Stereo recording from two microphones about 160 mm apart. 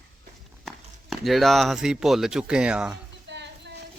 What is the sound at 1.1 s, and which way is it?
Speech, centre (ahead or behind).